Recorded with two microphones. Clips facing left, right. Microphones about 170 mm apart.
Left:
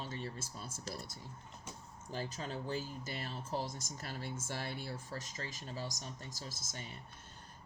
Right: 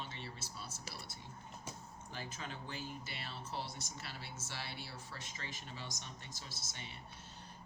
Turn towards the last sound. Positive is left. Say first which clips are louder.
# left 4 dB
turn(degrees=45)  # may be behind; listen again after turning